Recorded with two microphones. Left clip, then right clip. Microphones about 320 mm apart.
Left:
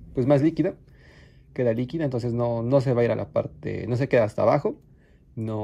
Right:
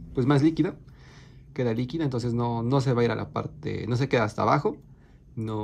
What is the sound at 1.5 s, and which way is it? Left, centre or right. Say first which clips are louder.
Speech: left 4 dB; centre.